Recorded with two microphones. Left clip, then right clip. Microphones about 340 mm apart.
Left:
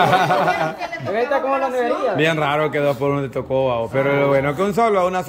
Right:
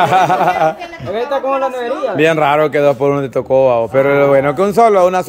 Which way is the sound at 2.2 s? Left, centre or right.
Centre.